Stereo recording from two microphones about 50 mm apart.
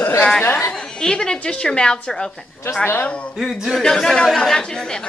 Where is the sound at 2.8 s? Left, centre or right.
Left.